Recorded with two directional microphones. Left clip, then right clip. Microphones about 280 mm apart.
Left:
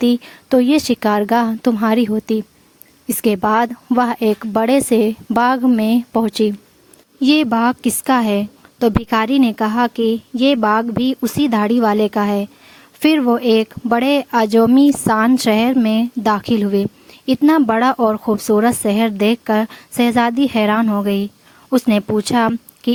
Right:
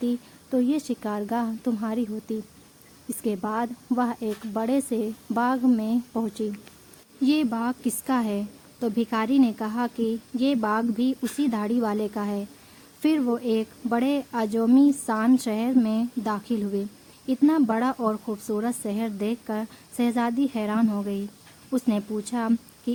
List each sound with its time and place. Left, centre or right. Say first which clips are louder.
0.0 s a woman's voice: left 12 dB; left